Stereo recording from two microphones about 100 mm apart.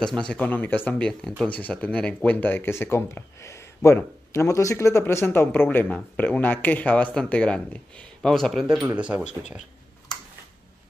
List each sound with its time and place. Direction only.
0.0 s speech: 10° left (ahead or behind)
8.8 s speech: 10° right (ahead or behind)